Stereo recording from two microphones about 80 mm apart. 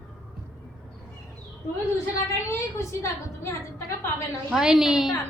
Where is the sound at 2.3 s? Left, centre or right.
Left.